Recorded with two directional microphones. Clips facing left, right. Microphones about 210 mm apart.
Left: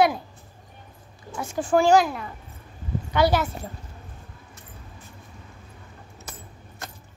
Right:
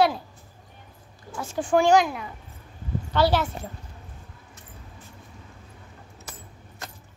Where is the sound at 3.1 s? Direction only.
15° left (ahead or behind).